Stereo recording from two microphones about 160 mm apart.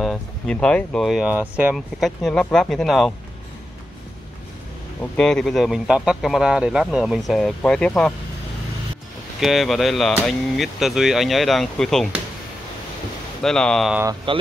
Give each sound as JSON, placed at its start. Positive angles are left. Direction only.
{"t": 0.0, "sound": "speech", "side_deg": 5}
{"t": 2.0, "sound": "speech", "side_deg": 0}
{"t": 5.1, "sound": "speech", "side_deg": 5}
{"t": 9.4, "sound": "speech", "side_deg": 0}
{"t": 13.4, "sound": "speech", "side_deg": 5}
{"t": 14.3, "sound": "speech", "side_deg": -35}